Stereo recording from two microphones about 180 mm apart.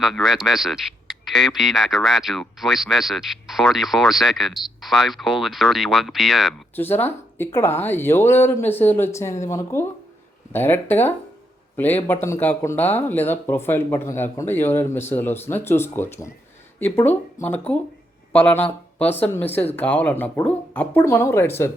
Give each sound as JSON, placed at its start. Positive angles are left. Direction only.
{"t": 0.0, "sound": "speech", "side_deg": 0}
{"t": 6.7, "sound": "speech", "side_deg": 10}